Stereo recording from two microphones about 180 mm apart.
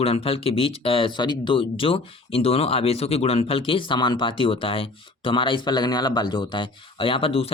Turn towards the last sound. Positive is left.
turn(degrees=30)  # may be behind; listen again after turning